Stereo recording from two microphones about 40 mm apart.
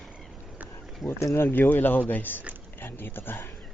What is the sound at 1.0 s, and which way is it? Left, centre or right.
Speech, left.